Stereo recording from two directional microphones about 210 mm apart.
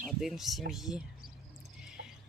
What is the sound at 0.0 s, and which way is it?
Speech, centre (ahead or behind).